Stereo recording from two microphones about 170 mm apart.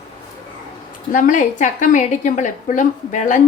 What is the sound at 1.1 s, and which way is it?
A woman's voice, 45° left (ahead or behind).